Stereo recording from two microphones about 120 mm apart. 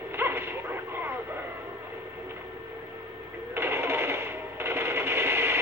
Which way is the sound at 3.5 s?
20° right (ahead or behind).